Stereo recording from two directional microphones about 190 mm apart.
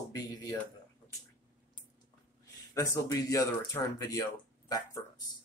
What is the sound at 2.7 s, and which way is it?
Speech, 15° left (ahead or behind).